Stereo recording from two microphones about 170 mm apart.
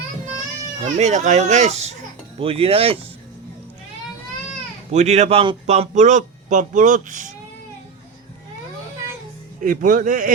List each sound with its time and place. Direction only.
0.9 s speech: 45° right (ahead or behind)
4.9 s speech: 40° right (ahead or behind)
9.6 s speech: 50° right (ahead or behind)